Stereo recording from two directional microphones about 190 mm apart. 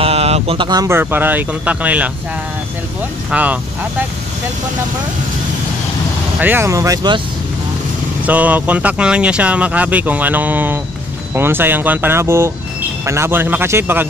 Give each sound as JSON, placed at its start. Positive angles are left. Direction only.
{"t": 0.0, "sound": "speech", "side_deg": -35}
{"t": 3.3, "sound": "speech", "side_deg": -5}
{"t": 6.4, "sound": "speech", "side_deg": -10}
{"t": 8.3, "sound": "speech", "side_deg": -10}